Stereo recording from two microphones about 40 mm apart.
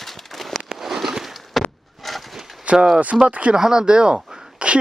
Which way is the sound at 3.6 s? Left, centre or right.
Centre.